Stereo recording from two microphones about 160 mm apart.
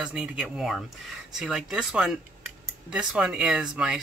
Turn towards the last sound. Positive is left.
turn(degrees=-5)  # may be behind; listen again after turning